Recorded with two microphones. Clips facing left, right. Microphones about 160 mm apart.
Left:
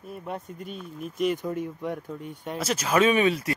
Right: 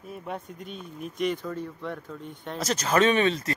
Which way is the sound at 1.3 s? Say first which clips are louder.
Left 3 dB; 15° left (ahead or behind).